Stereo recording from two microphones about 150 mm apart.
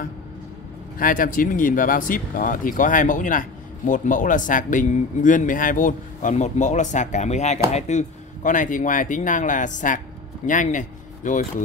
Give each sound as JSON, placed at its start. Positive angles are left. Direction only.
{"t": 0.9, "sound": "speech", "side_deg": 65}